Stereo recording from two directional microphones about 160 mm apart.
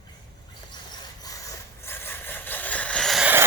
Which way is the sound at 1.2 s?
20° left (ahead or behind).